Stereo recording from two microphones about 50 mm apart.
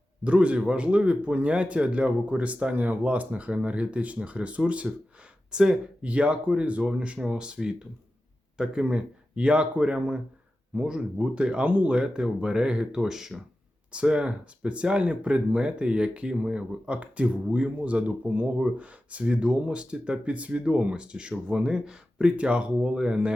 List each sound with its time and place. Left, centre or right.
0.3 s speech: right
5.5 s speech: centre
11.6 s speech: right; by 13.4 s centre
13.9 s speech: right